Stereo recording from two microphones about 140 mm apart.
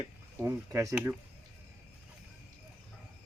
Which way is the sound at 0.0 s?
20° right (ahead or behind).